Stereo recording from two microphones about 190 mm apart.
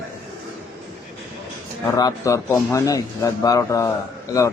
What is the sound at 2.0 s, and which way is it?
A man's voice, 20° left (ahead or behind).